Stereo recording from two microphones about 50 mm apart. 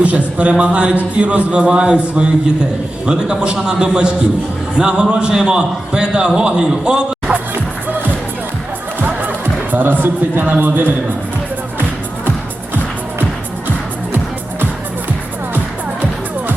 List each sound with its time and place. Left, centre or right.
0.0 s a man's voice: right
9.0 s music: right
9.7 s a man's voice: right